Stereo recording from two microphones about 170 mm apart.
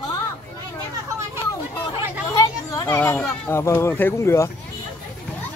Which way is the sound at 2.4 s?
20° left (ahead or behind).